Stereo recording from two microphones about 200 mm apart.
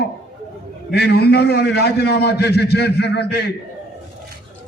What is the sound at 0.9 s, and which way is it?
A man's voice, 55° left (ahead or behind).